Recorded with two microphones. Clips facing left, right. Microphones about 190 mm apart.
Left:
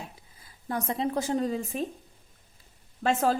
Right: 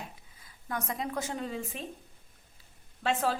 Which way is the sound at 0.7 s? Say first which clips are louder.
Left 6 dB; 30° left (ahead or behind).